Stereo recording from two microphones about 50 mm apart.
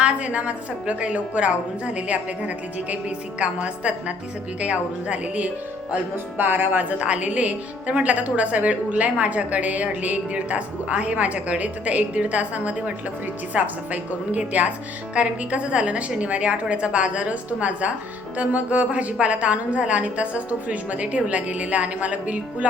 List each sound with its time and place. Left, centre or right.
0.0 s a woman's voice: right
6.3 s a woman's voice: right